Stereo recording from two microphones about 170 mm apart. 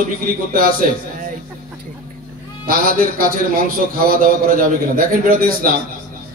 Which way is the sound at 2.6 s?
60° right (ahead or behind).